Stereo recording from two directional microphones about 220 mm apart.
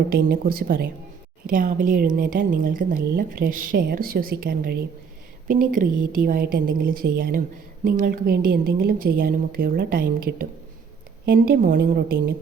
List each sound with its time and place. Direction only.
0.1 s a woman's voice: 40° right (ahead or behind)